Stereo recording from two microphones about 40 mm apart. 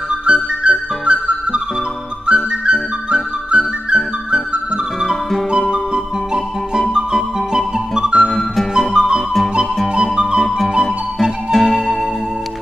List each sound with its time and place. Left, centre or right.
0.1 s music: right
6.9 s music: centre
8.2 s music: centre
8.7 s music: centre
11.5 s music: centre